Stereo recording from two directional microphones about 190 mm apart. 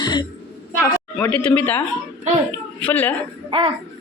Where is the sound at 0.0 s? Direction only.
20° left (ahead or behind).